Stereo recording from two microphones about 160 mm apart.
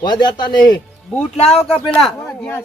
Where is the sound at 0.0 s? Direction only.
25° left (ahead or behind).